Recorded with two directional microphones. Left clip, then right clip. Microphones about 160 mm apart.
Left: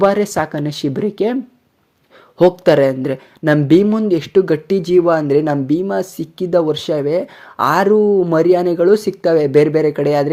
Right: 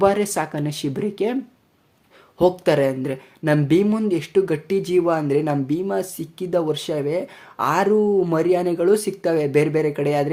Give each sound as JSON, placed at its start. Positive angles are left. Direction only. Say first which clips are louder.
{"t": 0.0, "sound": "speech", "louder": "left 5 dB", "side_deg": 25}
{"t": 2.4, "sound": "speech", "louder": "left 6 dB", "side_deg": 30}